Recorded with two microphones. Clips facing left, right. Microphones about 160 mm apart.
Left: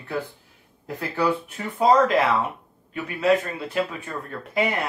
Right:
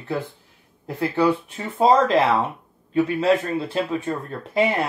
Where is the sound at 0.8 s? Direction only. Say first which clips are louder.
Right 4 dB; 25° right (ahead or behind).